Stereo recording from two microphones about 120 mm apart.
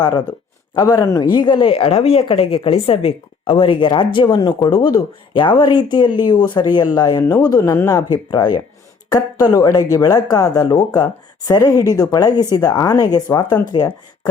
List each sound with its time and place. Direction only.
0.8 s a woman's voice: 35° left (ahead or behind)